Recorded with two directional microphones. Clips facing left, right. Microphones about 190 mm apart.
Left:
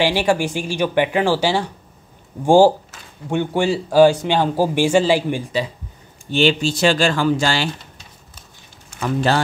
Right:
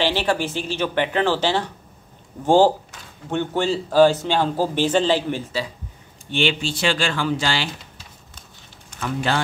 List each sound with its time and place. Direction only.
0.0 s speech: 10° left (ahead or behind)
6.3 s speech: 40° left (ahead or behind)
9.0 s speech: 40° left (ahead or behind)